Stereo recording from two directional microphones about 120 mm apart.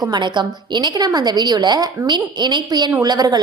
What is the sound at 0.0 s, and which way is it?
A woman's voice, 35° right (ahead or behind).